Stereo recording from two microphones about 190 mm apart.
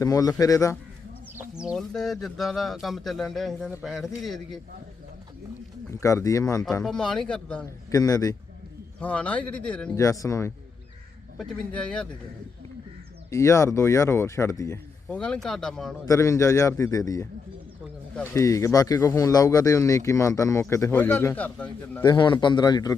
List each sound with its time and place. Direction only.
0.0 s speech: 20° left (ahead or behind)
1.4 s speech: 5° right (ahead or behind)
5.9 s speech: 15° left (ahead or behind)
6.8 s speech: 5° left (ahead or behind)
7.9 s a man's voice: 20° left (ahead or behind)
9.0 s speech: 5° left (ahead or behind)
9.9 s speech: 15° left (ahead or behind)
11.3 s speech: 5° left (ahead or behind)
13.3 s speech: 15° left (ahead or behind)
15.1 s speech: 5° left (ahead or behind)
16.0 s speech: 15° left (ahead or behind)
22.0 s a man's voice: 25° left (ahead or behind)